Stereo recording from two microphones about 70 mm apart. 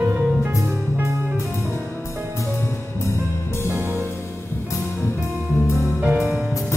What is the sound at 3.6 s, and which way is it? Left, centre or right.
Music, right.